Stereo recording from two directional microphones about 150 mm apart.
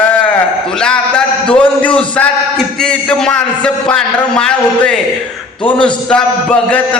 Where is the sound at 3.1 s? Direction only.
5° left (ahead or behind).